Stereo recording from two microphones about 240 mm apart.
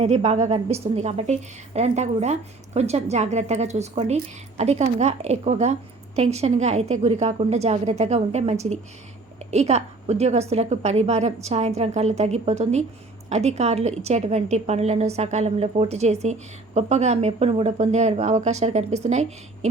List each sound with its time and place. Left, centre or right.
0.0 s a woman's voice: right